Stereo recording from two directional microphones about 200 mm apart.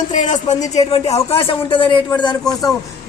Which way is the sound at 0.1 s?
35° left (ahead or behind).